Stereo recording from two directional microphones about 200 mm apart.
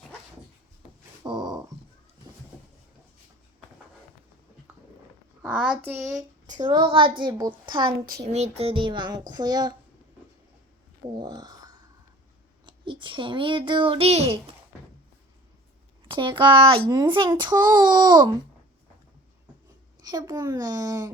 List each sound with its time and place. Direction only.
1.2 s a sound: 20° right (ahead or behind)
5.4 s speech: 5° right (ahead or behind)
6.5 s a child's voice: 20° right (ahead or behind)
8.0 s speech: 50° right (ahead or behind)
8.3 s a child's voice: 30° right (ahead or behind)
11.1 s a sound: 20° right (ahead or behind)
12.6 s a child's voice: 25° right (ahead or behind)
16.0 s a child's voice: 25° right (ahead or behind)
20.1 s a child's voice: 20° right (ahead or behind)